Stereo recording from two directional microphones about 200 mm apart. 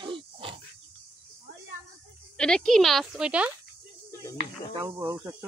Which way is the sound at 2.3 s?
5° left (ahead or behind).